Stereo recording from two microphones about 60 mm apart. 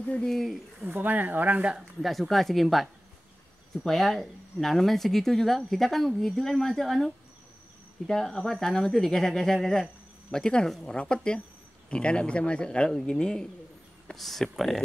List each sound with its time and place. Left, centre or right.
0.2 s speech: centre
0.8 s speech: right
2.0 s speech: centre
8.1 s speech: centre
14.1 s speech: centre